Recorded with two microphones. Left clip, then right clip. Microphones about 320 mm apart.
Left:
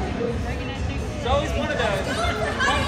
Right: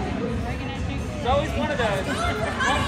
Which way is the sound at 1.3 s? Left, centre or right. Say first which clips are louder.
Even; right.